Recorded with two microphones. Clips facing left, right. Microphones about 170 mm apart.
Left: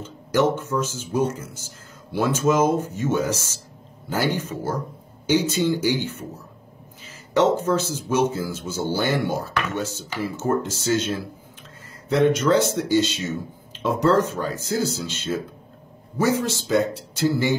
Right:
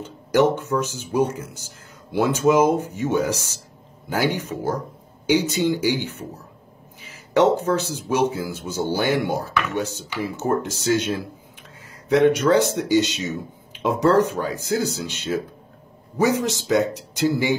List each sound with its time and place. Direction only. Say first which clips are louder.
0.0 s speech: right 2 dB; 15° right (ahead or behind)